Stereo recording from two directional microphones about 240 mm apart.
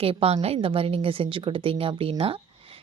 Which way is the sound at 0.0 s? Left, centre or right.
Right.